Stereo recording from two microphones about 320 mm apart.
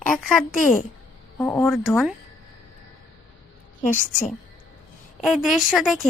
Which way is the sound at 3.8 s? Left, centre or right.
Left.